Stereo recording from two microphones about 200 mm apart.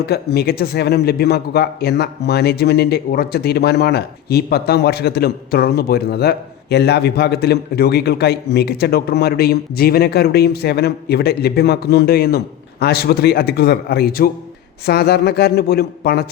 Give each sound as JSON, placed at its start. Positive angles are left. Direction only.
{"t": 0.0, "sound": "speech", "side_deg": 55}